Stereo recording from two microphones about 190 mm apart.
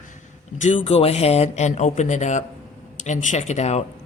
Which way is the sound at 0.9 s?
30° left (ahead or behind).